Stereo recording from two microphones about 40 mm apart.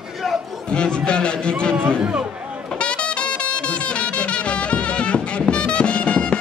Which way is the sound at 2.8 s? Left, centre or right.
Left.